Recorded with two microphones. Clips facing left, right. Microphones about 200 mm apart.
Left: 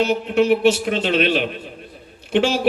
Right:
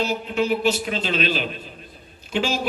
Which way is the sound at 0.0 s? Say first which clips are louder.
Left 6 dB; 65° left (ahead or behind).